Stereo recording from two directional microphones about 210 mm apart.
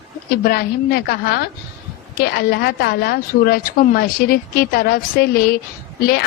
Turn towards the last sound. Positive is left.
turn(degrees=45)  # may be behind; listen again after turning